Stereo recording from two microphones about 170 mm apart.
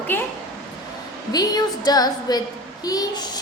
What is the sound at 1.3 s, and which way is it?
A child's voice, 25° left (ahead or behind).